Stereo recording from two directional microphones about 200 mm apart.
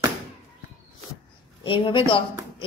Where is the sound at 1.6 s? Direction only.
25° left (ahead or behind).